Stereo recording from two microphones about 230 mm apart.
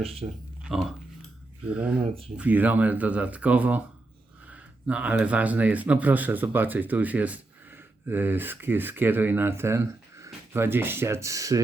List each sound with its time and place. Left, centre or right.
0.0 s speech: right
0.6 s speech: centre